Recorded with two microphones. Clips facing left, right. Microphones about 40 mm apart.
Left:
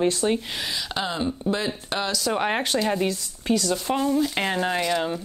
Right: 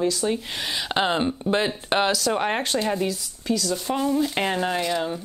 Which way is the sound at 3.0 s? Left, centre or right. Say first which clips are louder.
Left 1 dB; left.